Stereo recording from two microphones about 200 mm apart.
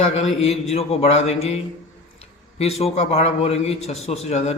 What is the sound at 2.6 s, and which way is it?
A man's voice, 30° left (ahead or behind).